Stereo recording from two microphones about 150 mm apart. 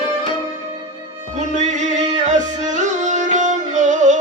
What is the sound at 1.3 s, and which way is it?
Music, 50° right (ahead or behind).